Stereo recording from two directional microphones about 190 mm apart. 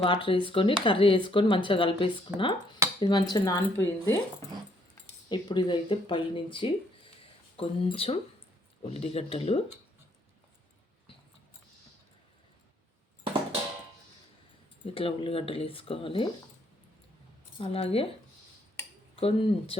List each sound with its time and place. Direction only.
0.0 s speech: 25° left (ahead or behind)
5.3 s speech: 25° left (ahead or behind)
14.8 s speech: 30° left (ahead or behind)
17.6 s speech: 30° left (ahead or behind)
19.1 s speech: 30° left (ahead or behind)